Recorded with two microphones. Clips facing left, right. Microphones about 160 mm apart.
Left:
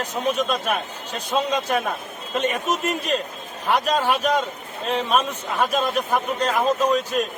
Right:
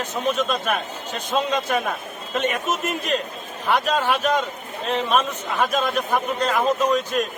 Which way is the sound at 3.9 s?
10° left (ahead or behind).